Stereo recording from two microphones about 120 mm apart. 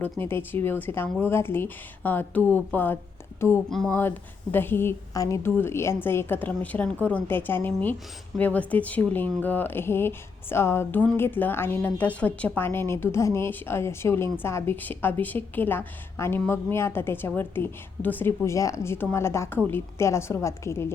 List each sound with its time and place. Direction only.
0.3 s speech: 20° left (ahead or behind)
3.7 s speech: 5° left (ahead or behind)
4.5 s a woman's voice: 20° left (ahead or behind)